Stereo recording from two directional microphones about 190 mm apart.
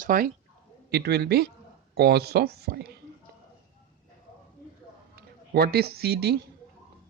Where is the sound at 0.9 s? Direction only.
55° right (ahead or behind).